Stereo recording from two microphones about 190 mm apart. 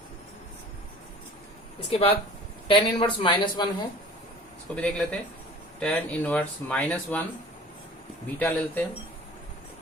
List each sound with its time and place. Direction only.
1.9 s speech: 30° left (ahead or behind)
4.7 s speech: 5° left (ahead or behind)
8.4 s speech: 5° left (ahead or behind)